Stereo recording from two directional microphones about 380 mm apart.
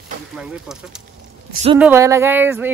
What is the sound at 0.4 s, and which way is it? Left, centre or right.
Speech, centre.